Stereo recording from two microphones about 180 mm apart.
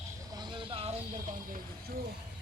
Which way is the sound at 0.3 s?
30° right (ahead or behind).